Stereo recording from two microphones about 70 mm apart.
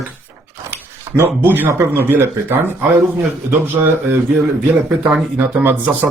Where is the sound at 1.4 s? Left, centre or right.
Right.